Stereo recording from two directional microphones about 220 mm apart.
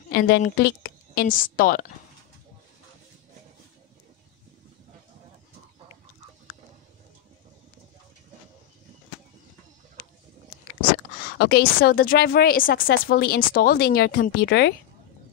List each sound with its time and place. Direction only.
0.1 s a woman's voice: 45° left (ahead or behind)
11.3 s a woman's voice: 45° left (ahead or behind)